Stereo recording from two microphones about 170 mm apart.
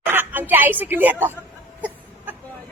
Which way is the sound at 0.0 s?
10° right (ahead or behind).